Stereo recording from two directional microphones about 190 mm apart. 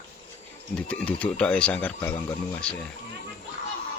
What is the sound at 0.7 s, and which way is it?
Speech, 5° left (ahead or behind).